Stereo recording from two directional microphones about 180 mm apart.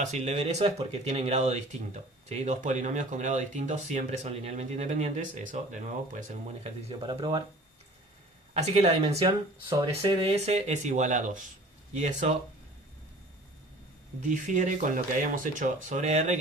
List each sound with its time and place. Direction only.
0.0 s speech: 40° right (ahead or behind)
7.1 s speech: 25° right (ahead or behind)
8.5 s speech: 35° right (ahead or behind)
14.2 s speech: 45° right (ahead or behind)